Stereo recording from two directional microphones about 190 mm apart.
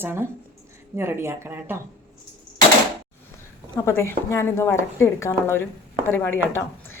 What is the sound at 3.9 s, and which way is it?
Speech, 15° left (ahead or behind).